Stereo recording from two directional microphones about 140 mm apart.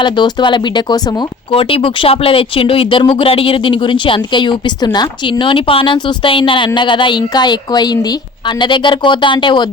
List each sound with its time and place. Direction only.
0.0 s speech: 35° left (ahead or behind)